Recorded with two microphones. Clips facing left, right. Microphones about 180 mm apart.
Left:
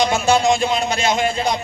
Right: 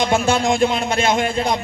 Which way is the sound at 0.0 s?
55° right (ahead or behind).